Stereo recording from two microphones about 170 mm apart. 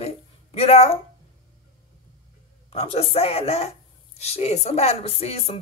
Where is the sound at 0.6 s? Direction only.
35° left (ahead or behind).